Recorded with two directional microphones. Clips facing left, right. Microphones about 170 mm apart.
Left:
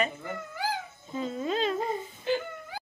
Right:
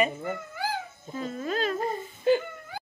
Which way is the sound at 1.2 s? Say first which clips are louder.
Left 1 dB; 20° left (ahead or behind).